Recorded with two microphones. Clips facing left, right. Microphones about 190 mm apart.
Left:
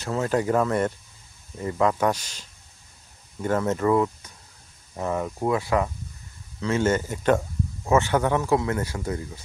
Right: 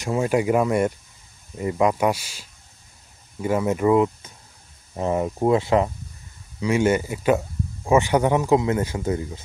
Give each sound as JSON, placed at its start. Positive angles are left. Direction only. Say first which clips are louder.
{"t": 0.0, "sound": "speech", "louder": "right 3 dB", "side_deg": -15}
{"t": 6.6, "sound": "speech", "louder": "right 3 dB", "side_deg": -15}